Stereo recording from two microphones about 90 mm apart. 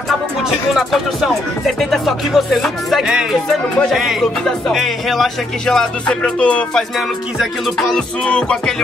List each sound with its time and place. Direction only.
0.4 s music: 5° right (ahead or behind); by 6.8 s 15° left (ahead or behind)
7.0 s music: centre (ahead or behind)